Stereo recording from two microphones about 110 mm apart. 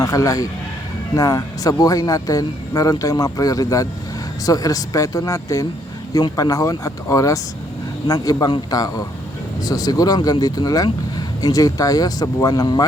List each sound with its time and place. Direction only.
0.0 s a man's voice: 30° left (ahead or behind)